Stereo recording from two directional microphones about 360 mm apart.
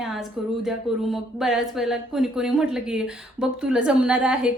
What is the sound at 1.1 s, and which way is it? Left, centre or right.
A woman's voice, centre.